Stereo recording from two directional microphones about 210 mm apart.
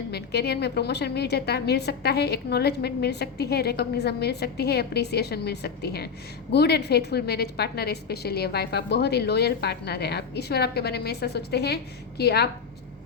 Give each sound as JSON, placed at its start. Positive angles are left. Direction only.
{"t": 0.1, "sound": "a woman's voice", "side_deg": 50}